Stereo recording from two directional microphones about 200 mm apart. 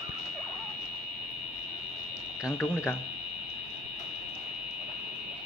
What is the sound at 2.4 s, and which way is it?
Speech, 15° left (ahead or behind).